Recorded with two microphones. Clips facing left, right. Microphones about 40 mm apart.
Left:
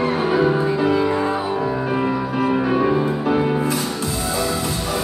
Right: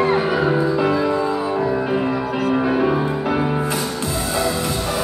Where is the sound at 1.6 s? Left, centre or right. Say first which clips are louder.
Right 1 dB; centre.